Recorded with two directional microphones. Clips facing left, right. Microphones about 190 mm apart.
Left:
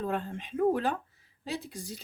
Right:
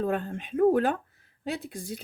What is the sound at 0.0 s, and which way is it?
Speech, 50° right (ahead or behind).